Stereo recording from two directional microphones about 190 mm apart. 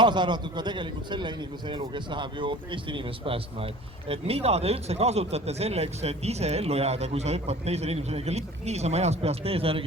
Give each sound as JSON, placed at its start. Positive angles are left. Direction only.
{"t": 0.0, "sound": "speech", "side_deg": -25}